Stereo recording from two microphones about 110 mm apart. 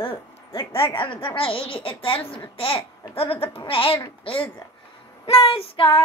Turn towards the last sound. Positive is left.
turn(degrees=55)  # may be behind; listen again after turning